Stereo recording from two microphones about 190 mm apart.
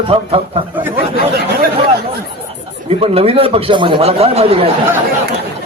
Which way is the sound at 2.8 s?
30° right (ahead or behind).